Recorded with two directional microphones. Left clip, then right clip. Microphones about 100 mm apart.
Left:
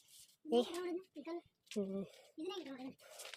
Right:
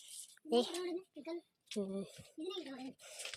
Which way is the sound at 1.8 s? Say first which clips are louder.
Right 1 dB; 5° left (ahead or behind).